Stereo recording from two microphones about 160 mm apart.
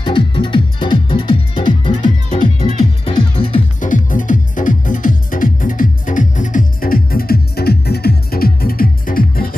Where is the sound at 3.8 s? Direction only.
55° left (ahead or behind).